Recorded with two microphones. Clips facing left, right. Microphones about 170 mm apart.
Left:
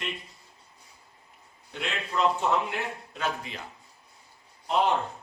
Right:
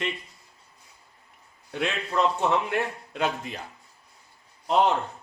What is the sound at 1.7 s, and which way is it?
A man's voice, centre (ahead or behind).